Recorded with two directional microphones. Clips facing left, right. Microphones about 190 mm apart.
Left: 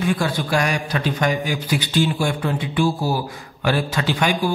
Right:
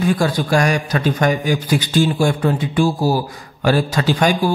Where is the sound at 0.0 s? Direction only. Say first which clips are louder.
Right 4 dB; 40° right (ahead or behind).